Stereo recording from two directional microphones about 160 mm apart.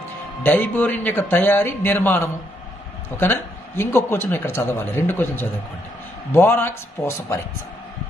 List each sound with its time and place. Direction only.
0.4 s a man's voice: 10° left (ahead or behind)